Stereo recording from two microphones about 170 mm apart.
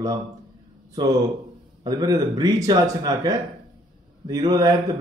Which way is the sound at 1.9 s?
20° right (ahead or behind).